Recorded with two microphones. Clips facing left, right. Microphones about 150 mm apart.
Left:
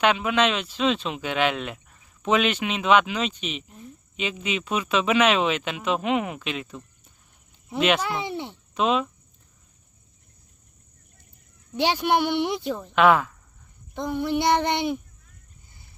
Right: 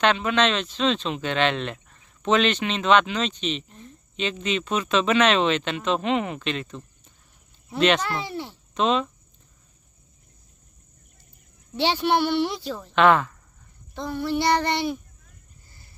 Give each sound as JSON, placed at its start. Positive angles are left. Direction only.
{"t": 0.0, "sound": "speech", "side_deg": 10}
{"t": 8.7, "sound": "hum", "side_deg": 5}
{"t": 11.8, "sound": "speech", "side_deg": 10}
{"t": 12.9, "sound": "speech", "side_deg": 5}
{"t": 13.9, "sound": "child singing", "side_deg": 20}